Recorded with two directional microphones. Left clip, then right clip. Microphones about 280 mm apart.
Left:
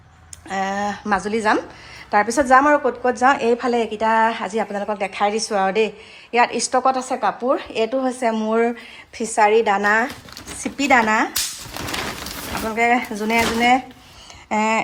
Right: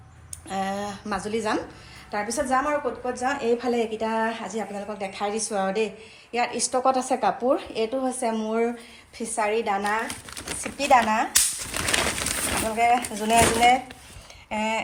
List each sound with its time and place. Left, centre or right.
0.4 s a sound: centre
2.0 s a woman's voice: centre
12.7 s speech: centre